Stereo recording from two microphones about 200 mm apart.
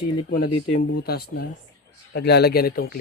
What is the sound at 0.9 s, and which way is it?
Speech, 50° left (ahead or behind).